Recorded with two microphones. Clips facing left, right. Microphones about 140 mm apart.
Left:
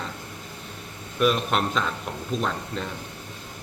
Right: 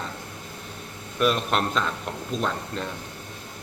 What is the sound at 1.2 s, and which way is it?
A man's voice, centre (ahead or behind).